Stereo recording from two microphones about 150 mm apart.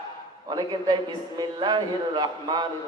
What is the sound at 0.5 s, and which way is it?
A man's voice, 30° right (ahead or behind).